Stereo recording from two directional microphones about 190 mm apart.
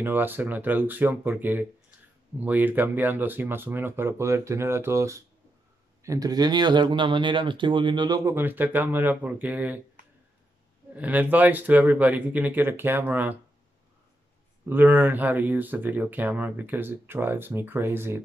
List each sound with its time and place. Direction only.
0.0 s speech: 10° right (ahead or behind)
11.0 s speech: 10° right (ahead or behind)
14.7 s speech: 10° right (ahead or behind)